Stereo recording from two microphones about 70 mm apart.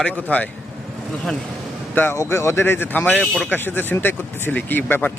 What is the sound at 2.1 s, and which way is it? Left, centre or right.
Speech, left.